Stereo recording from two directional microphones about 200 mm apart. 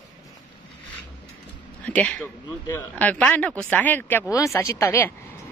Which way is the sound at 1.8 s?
5° left (ahead or behind).